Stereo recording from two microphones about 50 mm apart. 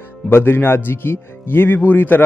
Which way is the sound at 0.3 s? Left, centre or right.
Left.